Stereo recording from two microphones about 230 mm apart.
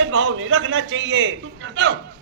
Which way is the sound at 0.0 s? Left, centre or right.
Right.